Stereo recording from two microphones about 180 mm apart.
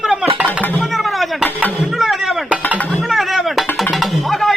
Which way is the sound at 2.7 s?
5° left (ahead or behind).